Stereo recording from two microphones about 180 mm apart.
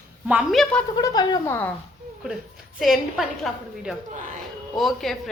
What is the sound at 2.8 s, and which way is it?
A woman's voice, centre (ahead or behind).